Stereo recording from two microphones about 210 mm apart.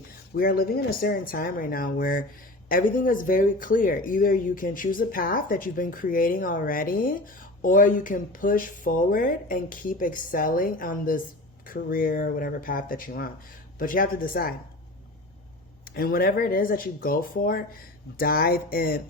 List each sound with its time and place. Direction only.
0.3 s speech: 45° left (ahead or behind)
16.0 s speech: 45° left (ahead or behind)